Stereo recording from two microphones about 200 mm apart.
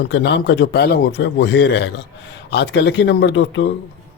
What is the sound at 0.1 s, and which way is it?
Speech, 60° left (ahead or behind).